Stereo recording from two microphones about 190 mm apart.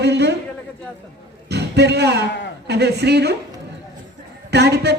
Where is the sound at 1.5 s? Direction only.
60° right (ahead or behind).